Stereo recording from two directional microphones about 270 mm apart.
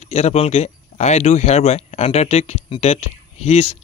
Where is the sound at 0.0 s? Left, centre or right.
Left.